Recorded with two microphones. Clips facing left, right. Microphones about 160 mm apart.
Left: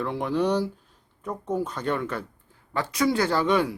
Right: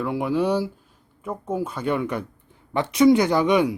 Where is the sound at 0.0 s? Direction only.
5° right (ahead or behind).